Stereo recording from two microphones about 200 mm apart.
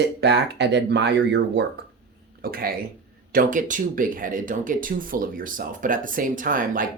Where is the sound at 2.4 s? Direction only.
45° right (ahead or behind).